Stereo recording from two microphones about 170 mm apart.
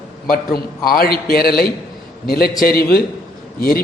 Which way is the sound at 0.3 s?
60° left (ahead or behind).